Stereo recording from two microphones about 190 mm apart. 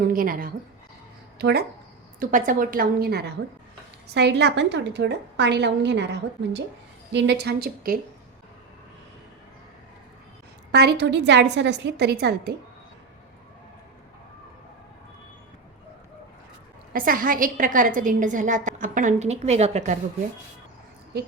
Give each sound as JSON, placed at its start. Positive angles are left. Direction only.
{"t": 0.1, "sound": "a woman's voice", "side_deg": -50}
{"t": 1.4, "sound": "speech", "side_deg": -60}
{"t": 2.1, "sound": "a woman's voice", "side_deg": -45}
{"t": 7.1, "sound": "a woman's voice", "side_deg": -65}
{"t": 10.7, "sound": "a woman's voice", "side_deg": -60}
{"t": 16.9, "sound": "a woman's voice", "side_deg": -45}